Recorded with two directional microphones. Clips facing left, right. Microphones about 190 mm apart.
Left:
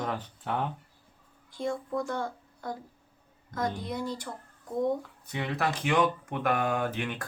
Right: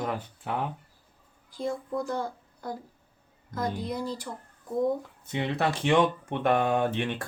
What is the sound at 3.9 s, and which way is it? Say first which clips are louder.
A woman's voice: right 1 dB; 35° right (ahead or behind).